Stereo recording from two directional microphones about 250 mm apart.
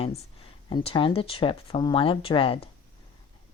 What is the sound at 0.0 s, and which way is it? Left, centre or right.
A woman's voice, left.